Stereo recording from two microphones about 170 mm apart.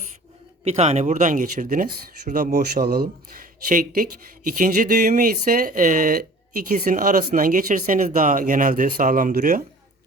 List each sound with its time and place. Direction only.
0.6 s speech: 40° right (ahead or behind); by 3.1 s 65° right (ahead or behind)
3.7 s speech: 55° right (ahead or behind)